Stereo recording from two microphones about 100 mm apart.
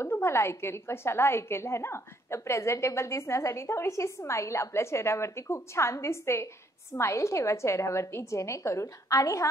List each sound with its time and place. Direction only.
0.0 s a woman's voice: 25° left (ahead or behind)